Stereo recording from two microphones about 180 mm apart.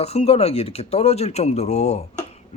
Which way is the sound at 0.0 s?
35° left (ahead or behind).